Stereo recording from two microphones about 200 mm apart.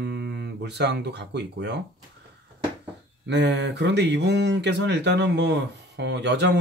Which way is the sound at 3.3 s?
60° right (ahead or behind).